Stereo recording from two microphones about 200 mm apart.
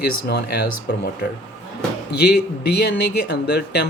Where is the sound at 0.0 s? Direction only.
55° left (ahead or behind).